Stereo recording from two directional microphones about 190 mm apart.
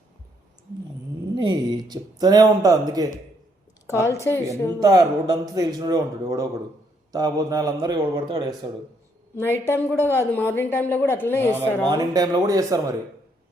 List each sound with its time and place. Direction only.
1.4 s speech: 20° right (ahead or behind)
3.8 s speech: 15° left (ahead or behind)
4.8 s a man's voice: 20° right (ahead or behind)
9.4 s speech: 15° left (ahead or behind)
11.9 s a man's voice: 20° right (ahead or behind)